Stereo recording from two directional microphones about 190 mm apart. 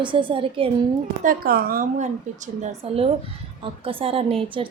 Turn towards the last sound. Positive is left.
turn(degrees=-25)  # may be behind; listen again after turning